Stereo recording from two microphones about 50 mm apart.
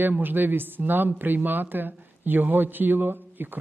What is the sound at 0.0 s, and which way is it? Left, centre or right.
Speech, right.